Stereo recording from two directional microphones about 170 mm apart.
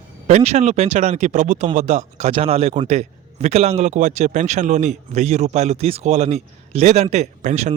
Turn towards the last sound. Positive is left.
turn(degrees=-45)  # may be behind; listen again after turning